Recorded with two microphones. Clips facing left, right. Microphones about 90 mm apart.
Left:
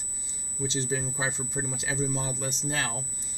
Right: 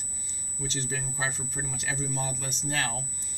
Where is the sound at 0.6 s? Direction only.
20° left (ahead or behind).